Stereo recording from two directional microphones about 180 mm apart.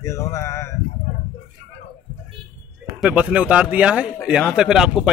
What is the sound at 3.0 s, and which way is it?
A man's voice, 5° right (ahead or behind).